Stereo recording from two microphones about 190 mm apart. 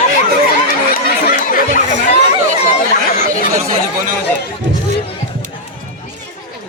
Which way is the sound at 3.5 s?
45° right (ahead or behind).